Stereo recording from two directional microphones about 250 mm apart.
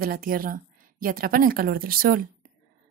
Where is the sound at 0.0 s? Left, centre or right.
Right.